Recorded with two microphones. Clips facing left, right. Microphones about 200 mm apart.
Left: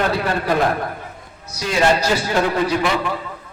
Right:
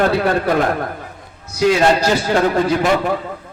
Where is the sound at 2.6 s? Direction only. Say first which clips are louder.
Right 4 dB; 50° right (ahead or behind).